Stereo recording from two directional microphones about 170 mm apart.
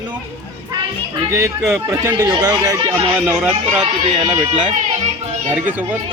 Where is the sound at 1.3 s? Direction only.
15° right (ahead or behind).